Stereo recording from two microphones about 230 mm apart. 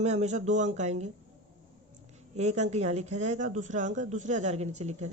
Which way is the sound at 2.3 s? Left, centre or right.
Right.